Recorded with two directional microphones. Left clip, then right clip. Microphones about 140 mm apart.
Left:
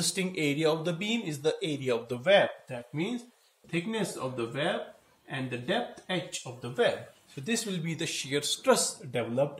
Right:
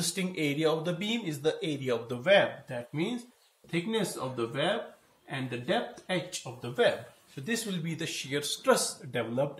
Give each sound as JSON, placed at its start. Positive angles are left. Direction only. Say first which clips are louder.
{"t": 0.0, "sound": "speech", "louder": "left 2 dB", "side_deg": 30}
{"t": 2.9, "sound": "speech", "louder": "left 1 dB", "side_deg": 0}
{"t": 7.4, "sound": "speech", "louder": "left 1 dB", "side_deg": 30}